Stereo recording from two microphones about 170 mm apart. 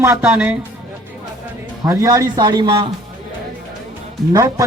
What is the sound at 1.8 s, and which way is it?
Speech, 20° right (ahead or behind).